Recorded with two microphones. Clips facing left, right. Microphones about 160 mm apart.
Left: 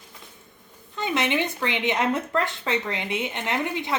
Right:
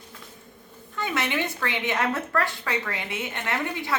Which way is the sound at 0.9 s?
20° left (ahead or behind).